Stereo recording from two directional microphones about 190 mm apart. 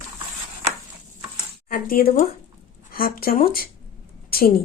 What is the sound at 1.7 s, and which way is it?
Speech, 50° left (ahead or behind).